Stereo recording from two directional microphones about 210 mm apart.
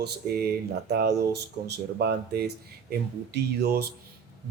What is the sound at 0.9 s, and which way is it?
Speech, 50° right (ahead or behind).